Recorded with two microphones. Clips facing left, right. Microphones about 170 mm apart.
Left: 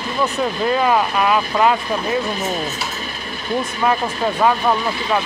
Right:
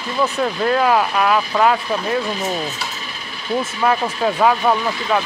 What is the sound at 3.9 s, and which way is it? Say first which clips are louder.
Speech: right 1 dB; centre (ahead or behind).